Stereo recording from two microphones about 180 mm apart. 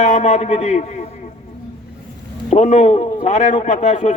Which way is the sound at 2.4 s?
40° left (ahead or behind).